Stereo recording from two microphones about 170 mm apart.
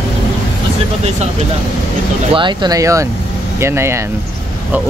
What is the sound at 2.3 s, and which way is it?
A man's voice, 25° right (ahead or behind).